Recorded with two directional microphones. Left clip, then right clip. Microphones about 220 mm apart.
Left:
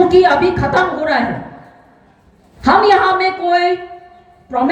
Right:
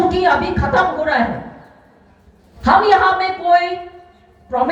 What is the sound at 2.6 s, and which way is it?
A woman's voice, 50° left (ahead or behind).